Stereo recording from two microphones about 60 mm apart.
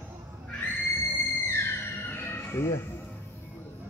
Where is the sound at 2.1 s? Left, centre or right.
Left.